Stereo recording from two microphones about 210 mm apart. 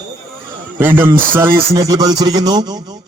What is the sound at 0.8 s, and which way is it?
Speech, 10° right (ahead or behind).